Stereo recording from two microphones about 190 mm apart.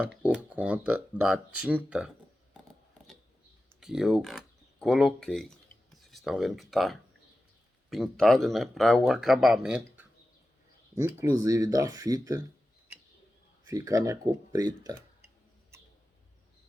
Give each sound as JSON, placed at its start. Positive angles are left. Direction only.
{"t": 0.0, "sound": "speech", "side_deg": -5}
{"t": 3.8, "sound": "speech", "side_deg": 0}
{"t": 13.7, "sound": "speech", "side_deg": -15}